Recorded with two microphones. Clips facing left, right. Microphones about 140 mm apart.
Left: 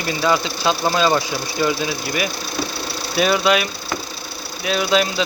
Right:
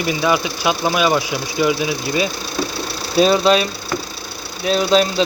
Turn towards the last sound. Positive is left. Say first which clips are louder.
# right 3 dB
turn(degrees=-35)  # may be behind; listen again after turning